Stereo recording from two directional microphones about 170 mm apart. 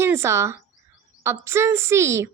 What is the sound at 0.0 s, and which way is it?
A woman's voice, 15° right (ahead or behind).